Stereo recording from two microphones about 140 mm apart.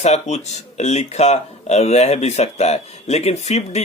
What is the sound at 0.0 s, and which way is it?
Speech, 55° left (ahead or behind).